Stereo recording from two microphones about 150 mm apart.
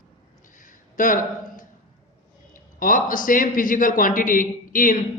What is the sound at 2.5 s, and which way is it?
A man's voice, 65° left (ahead or behind).